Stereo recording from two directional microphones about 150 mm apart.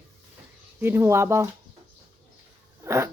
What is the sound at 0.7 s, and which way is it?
Speech, 15° right (ahead or behind).